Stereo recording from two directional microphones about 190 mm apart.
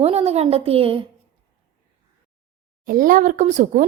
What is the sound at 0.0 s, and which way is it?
A woman's voice, 35° right (ahead or behind).